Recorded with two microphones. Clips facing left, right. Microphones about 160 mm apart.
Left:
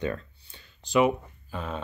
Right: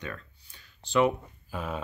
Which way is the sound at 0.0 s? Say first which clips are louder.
Left 9 dB; 30° left (ahead or behind).